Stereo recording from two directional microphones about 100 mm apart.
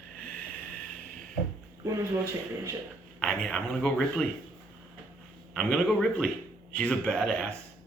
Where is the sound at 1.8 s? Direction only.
30° right (ahead or behind).